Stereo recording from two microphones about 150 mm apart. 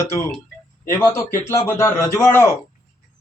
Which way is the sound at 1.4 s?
15° left (ahead or behind).